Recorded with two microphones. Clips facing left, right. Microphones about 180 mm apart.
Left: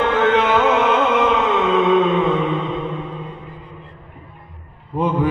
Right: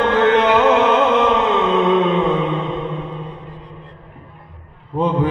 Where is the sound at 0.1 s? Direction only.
5° left (ahead or behind).